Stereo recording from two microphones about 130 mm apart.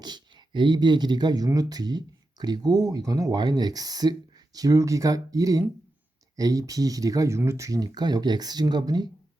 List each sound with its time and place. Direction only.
0.0 s speech: 35° right (ahead or behind)